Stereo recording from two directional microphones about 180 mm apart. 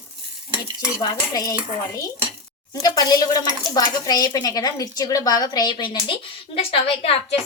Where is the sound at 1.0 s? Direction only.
20° left (ahead or behind).